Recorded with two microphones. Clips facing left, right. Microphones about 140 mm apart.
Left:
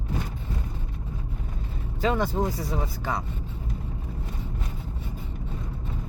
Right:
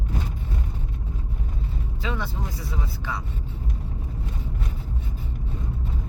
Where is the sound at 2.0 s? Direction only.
45° left (ahead or behind).